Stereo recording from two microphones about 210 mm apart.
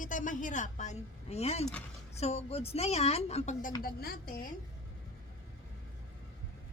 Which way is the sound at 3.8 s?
45° left (ahead or behind).